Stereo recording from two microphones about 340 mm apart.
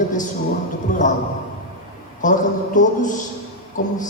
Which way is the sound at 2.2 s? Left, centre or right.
Left.